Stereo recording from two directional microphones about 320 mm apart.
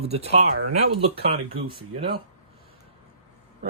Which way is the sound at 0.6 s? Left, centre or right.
Right.